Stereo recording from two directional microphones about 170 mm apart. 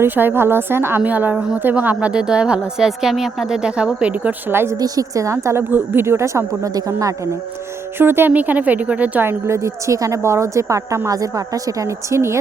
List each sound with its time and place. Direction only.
0.0 s speech: 15° right (ahead or behind)